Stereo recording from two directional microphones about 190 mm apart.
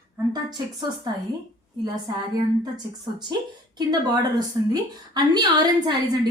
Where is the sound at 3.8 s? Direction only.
20° right (ahead or behind).